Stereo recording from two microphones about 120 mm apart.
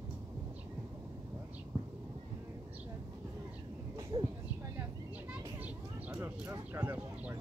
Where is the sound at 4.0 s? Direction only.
40° right (ahead or behind).